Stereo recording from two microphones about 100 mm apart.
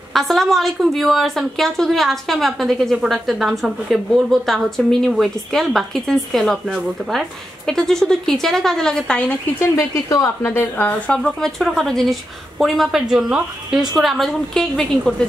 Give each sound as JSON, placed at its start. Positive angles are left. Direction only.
{"t": 0.1, "sound": "a woman's voice", "side_deg": 0}
{"t": 10.0, "sound": "a woman's voice", "side_deg": 40}
{"t": 10.4, "sound": "a woman's voice", "side_deg": 20}